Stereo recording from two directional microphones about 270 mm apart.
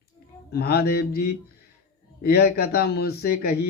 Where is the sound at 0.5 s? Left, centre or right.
Left.